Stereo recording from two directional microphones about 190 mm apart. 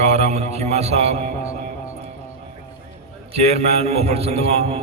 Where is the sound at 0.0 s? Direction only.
35° right (ahead or behind).